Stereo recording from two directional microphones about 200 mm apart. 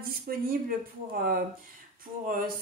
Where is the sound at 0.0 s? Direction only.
45° right (ahead or behind).